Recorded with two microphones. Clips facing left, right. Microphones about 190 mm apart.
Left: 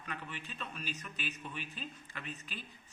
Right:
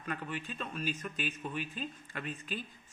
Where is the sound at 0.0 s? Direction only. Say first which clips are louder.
Right 6 dB; 45° right (ahead or behind).